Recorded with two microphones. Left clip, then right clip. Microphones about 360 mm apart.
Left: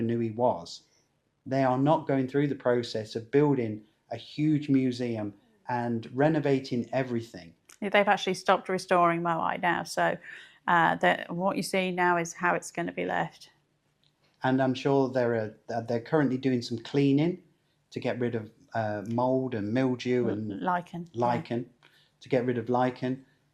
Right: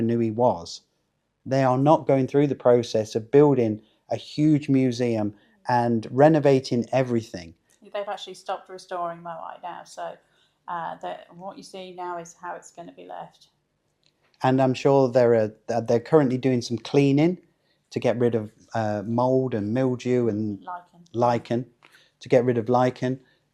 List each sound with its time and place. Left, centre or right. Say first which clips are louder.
0.0 s speech: right 5 dB; right
7.8 s speech: left 7 dB; left
10.3 s a sound: left 9 dB; left
10.9 s speech: left 9 dB; left
11.8 s speech: left 7 dB; left
12.4 s speech: left 8 dB; left
14.3 s speech: right 6 dB; right
20.6 s speech: left 7 dB; left
21.0 s speech: right 6 dB; right